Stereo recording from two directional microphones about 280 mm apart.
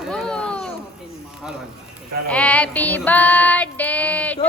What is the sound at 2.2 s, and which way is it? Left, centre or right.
Female singing, centre.